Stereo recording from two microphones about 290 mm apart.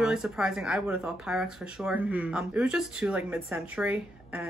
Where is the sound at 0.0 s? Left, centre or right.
Centre.